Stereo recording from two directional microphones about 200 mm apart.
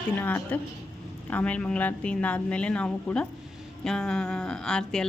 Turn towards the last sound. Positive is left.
turn(degrees=5)  # may be behind; listen again after turning